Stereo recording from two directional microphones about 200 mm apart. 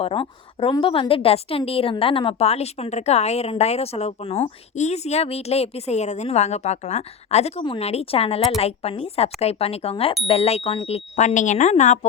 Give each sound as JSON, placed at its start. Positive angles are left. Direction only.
{"t": 0.0, "sound": "a woman's voice", "side_deg": 25}